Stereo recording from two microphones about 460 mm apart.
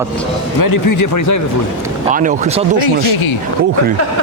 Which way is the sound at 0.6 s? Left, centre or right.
Left.